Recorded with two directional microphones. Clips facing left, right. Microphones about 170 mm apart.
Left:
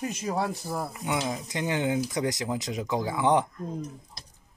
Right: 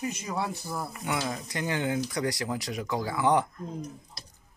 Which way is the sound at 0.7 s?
20° left (ahead or behind).